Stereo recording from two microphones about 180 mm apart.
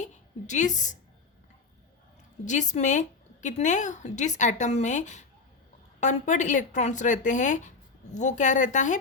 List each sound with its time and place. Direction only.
0.0 s a woman's voice: 40° left (ahead or behind)
2.4 s speech: 40° left (ahead or behind)